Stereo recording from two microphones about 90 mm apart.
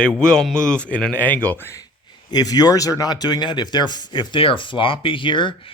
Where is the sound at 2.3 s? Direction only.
45° left (ahead or behind).